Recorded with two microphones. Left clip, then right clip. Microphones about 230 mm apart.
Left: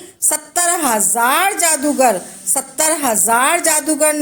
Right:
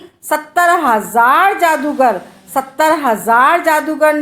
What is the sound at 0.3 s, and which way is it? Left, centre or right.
A woman's voice, left.